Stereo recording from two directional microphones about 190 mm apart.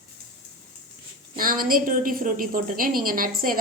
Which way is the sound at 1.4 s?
50° right (ahead or behind).